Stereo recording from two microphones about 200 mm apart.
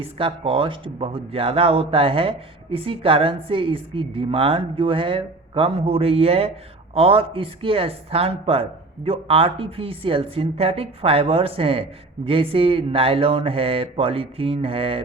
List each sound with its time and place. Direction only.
0.0 s speech: 25° right (ahead or behind)